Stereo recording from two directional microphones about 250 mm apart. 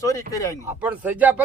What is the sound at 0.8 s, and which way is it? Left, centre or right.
Speech, centre.